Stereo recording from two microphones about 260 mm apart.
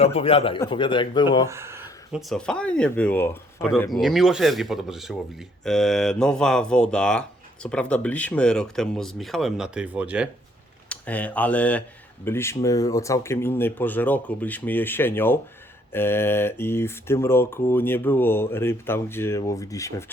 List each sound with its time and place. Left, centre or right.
0.0 s a man's voice: left
1.5 s speech: centre
10.8 s speech: centre